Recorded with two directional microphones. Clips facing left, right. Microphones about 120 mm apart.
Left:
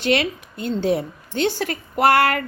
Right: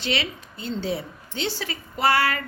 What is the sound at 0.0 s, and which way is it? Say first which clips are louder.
A woman's voice: left 8 dB; 50° left (ahead or behind).